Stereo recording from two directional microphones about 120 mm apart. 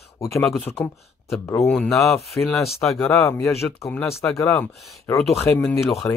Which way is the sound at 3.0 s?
25° left (ahead or behind).